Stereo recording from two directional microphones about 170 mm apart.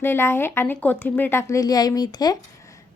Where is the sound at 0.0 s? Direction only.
15° left (ahead or behind).